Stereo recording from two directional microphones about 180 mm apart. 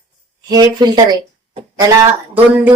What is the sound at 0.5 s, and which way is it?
Speech, 20° right (ahead or behind).